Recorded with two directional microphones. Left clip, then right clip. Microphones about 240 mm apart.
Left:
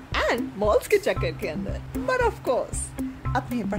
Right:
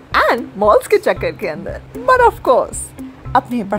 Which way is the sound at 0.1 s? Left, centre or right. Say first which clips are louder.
Right 11 dB; centre.